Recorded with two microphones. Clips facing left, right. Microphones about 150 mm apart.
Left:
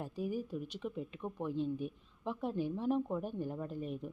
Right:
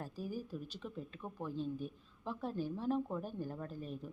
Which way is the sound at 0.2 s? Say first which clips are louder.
Left 6 dB; 65° left (ahead or behind).